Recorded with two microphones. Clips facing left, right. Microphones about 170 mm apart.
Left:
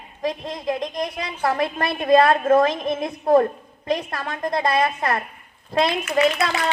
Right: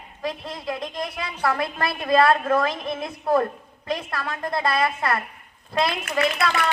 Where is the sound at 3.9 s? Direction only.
20° left (ahead or behind).